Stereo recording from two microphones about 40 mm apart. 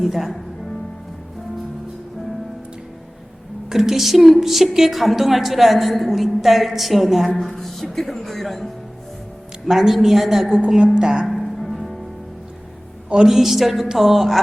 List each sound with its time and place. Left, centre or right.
0.0 s a woman's voice: centre
3.7 s a woman's voice: centre
9.6 s a woman's voice: centre
10.9 s speech: right
11.3 s music: centre
13.2 s a woman's voice: centre